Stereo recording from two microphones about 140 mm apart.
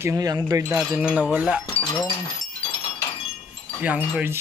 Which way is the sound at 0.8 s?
10° right (ahead or behind).